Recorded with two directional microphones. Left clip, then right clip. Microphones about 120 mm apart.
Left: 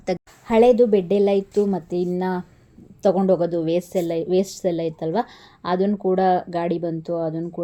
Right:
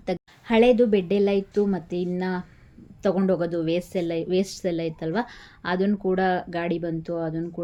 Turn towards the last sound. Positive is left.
turn(degrees=30)  # may be behind; listen again after turning